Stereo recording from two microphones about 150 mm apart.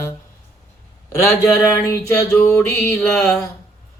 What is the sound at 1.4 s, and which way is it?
Speech, 20° left (ahead or behind).